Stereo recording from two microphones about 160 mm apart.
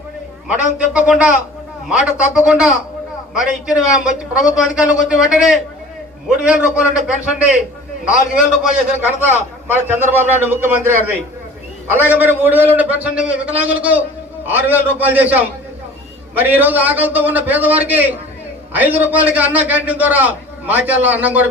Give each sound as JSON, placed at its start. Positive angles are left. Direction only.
{"t": 0.4, "sound": "a man's voice", "side_deg": -10}
{"t": 9.0, "sound": "a man's voice", "side_deg": -10}